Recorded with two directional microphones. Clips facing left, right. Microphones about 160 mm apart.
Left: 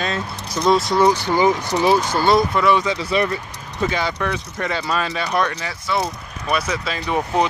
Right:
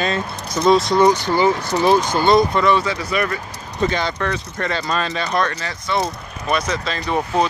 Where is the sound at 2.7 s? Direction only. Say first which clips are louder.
Left 1 dB; 20° left (ahead or behind).